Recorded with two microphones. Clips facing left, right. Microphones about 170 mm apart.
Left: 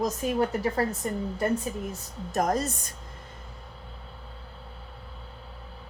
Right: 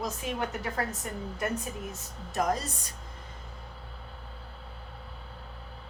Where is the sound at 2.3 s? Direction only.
45° left (ahead or behind).